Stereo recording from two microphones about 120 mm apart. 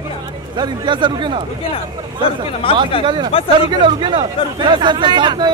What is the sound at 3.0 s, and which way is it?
Speech, 40° right (ahead or behind).